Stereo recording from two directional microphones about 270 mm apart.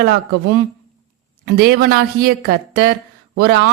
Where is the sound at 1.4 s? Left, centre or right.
Right.